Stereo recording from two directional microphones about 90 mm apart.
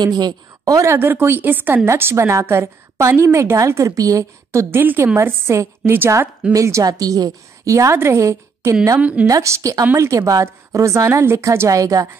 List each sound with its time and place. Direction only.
0.0 s speech: 50° right (ahead or behind)
0.9 s a woman's voice: 25° right (ahead or behind); by 12.1 s 40° right (ahead or behind)